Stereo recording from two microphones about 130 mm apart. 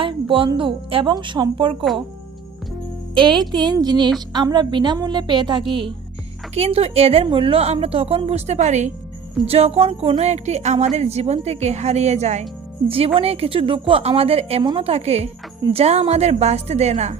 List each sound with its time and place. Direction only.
0.0 s speech: 40° right (ahead or behind)
3.2 s speech: 35° right (ahead or behind)
6.5 s a woman's voice: 50° right (ahead or behind)
9.5 s a woman's voice: 50° right (ahead or behind)
13.1 s a woman's voice: 50° right (ahead or behind)
14.6 s speech: 35° right (ahead or behind)
14.8 s a woman's voice: 55° right (ahead or behind)